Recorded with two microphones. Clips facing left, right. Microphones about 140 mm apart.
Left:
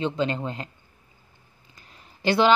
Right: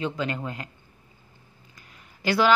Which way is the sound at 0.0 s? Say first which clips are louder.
Left 3 dB; 25° left (ahead or behind).